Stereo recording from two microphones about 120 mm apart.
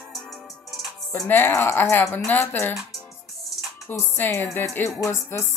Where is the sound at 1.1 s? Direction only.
15° left (ahead or behind).